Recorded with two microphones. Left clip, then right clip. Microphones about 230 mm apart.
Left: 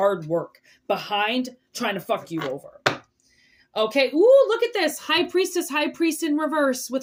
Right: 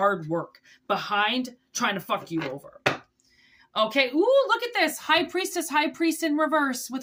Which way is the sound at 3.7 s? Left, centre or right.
Centre.